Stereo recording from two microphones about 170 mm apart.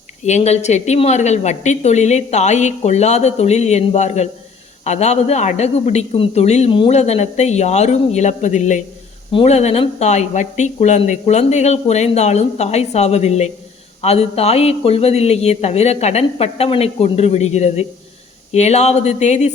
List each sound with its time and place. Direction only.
0.3 s speech: 40° left (ahead or behind)